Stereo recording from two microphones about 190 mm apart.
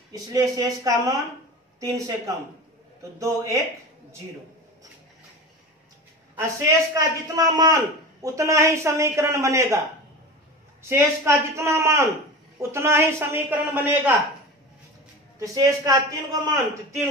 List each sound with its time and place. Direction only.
0.3 s a man's voice: 15° right (ahead or behind)
6.3 s a man's voice: 15° right (ahead or behind)
10.9 s a man's voice: 15° right (ahead or behind)
15.3 s a man's voice: 15° right (ahead or behind)